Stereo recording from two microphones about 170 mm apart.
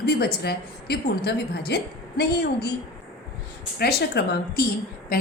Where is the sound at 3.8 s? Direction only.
70° left (ahead or behind).